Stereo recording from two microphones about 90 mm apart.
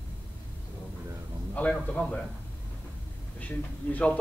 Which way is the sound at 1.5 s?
15° left (ahead or behind).